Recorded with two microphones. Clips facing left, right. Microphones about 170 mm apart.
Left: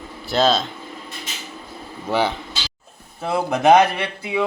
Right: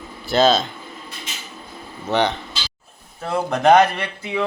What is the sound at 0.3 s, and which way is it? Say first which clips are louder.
Speech: right 2 dB; centre (ahead or behind).